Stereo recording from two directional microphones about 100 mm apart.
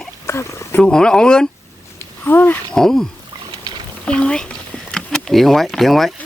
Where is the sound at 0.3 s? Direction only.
25° left (ahead or behind).